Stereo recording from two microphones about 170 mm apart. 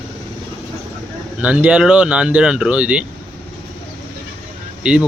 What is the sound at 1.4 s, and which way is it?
Speech, 10° right (ahead or behind).